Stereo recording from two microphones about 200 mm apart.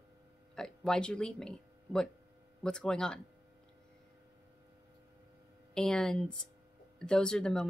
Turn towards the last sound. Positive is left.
turn(degrees=5)  # may be behind; listen again after turning